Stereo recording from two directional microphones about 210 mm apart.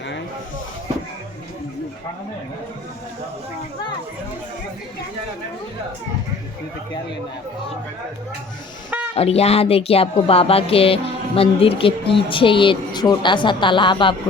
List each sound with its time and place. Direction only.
9.1 s speech: 30° left (ahead or behind)